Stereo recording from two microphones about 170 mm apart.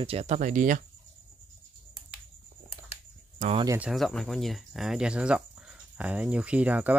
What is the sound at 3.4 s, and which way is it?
Speech, 50° right (ahead or behind).